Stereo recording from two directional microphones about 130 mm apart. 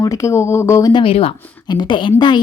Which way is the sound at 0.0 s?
25° left (ahead or behind).